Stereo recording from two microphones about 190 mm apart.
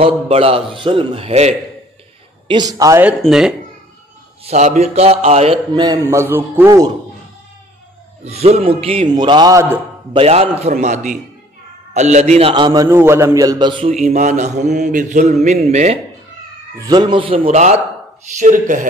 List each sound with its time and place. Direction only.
0.0 s mantra: 30° right (ahead or behind)
2.4 s a man's voice: 20° right (ahead or behind)
3.1 s speech: 5° right (ahead or behind)
4.5 s a man's voice: 35° right (ahead or behind); by 6.9 s 15° right (ahead or behind)
8.2 s mantra: 35° right (ahead or behind)
8.6 s a man's voice: 30° right (ahead or behind)
10.1 s mantra: 30° right (ahead or behind)
11.9 s a man's voice: 35° right (ahead or behind)
13.8 s mantra: 40° right (ahead or behind)
16.7 s a man's voice: 20° right (ahead or behind); by 17.7 s 40° right (ahead or behind)
18.4 s mantra: 40° right (ahead or behind)